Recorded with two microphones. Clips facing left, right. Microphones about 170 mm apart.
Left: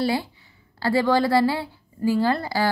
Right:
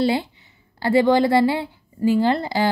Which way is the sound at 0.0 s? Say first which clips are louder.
Right 3 dB; 25° right (ahead or behind).